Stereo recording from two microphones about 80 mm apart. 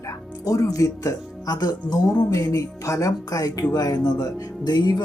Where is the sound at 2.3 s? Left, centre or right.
Left.